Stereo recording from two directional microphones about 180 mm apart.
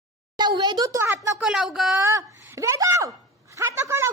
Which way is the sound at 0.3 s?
25° right (ahead or behind).